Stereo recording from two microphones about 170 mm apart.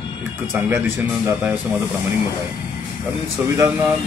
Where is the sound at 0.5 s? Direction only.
10° right (ahead or behind).